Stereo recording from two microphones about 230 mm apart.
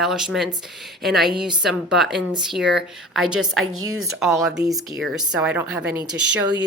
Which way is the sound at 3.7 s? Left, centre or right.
Right.